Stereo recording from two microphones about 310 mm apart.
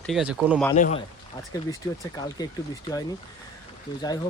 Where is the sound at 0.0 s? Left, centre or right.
Centre.